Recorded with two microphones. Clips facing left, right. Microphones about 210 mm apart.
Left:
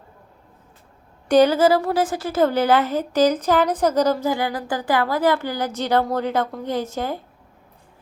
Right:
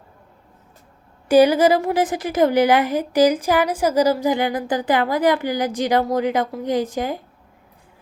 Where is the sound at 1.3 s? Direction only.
10° right (ahead or behind).